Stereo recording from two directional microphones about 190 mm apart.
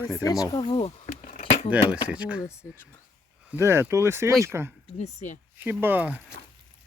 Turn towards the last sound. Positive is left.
turn(degrees=-10)  # may be behind; listen again after turning